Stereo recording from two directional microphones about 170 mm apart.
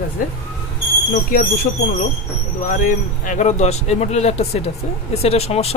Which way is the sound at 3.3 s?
45° left (ahead or behind).